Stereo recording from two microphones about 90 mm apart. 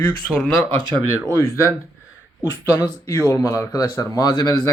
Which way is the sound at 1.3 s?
40° left (ahead or behind).